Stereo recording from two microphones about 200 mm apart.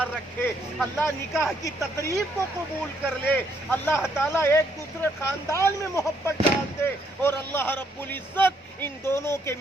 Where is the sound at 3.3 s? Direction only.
10° left (ahead or behind).